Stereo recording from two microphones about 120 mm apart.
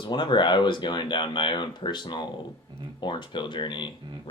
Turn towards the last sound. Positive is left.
turn(degrees=40)  # may be behind; listen again after turning